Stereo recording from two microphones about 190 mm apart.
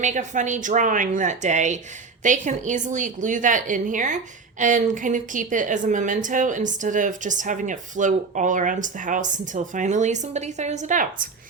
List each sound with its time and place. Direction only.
0.0 s a woman's voice: 40° right (ahead or behind)